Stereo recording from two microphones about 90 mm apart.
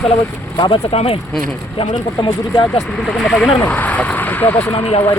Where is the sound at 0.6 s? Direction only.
65° left (ahead or behind).